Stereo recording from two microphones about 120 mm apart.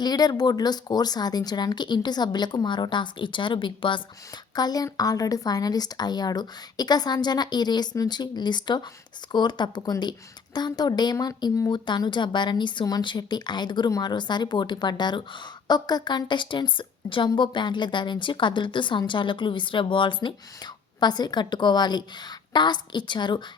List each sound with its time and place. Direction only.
0.0 s a woman's voice: 35° left (ahead or behind)